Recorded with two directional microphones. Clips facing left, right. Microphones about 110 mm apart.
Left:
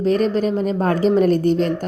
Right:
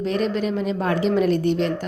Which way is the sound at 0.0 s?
40° left (ahead or behind).